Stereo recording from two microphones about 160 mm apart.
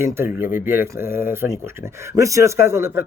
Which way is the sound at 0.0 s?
15° right (ahead or behind).